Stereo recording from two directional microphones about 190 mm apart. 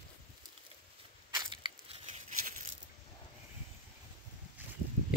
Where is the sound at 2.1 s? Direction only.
40° right (ahead or behind).